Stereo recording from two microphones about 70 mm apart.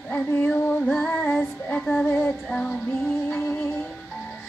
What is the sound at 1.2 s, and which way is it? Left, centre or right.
Child singing, left.